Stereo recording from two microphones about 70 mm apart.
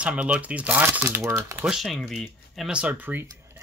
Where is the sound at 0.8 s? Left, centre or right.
Right.